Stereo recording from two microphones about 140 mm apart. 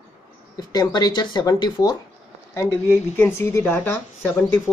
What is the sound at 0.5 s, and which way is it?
Speech, 30° left (ahead or behind).